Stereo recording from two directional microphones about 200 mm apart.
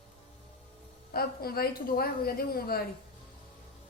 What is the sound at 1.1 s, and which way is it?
A woman's voice, 50° left (ahead or behind).